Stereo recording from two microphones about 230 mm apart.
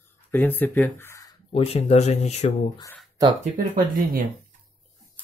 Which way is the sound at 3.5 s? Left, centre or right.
Right.